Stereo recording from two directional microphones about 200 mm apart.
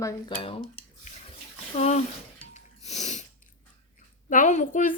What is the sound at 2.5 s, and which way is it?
Snort, 35° left (ahead or behind).